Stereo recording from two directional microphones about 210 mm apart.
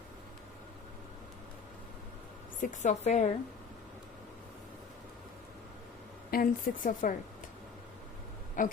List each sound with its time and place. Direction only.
2.6 s speech: 35° left (ahead or behind)
6.3 s speech: 40° left (ahead or behind)
8.6 s speech: 40° left (ahead or behind)